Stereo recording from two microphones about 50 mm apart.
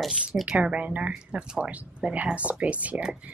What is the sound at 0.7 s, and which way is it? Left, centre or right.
Speech, right.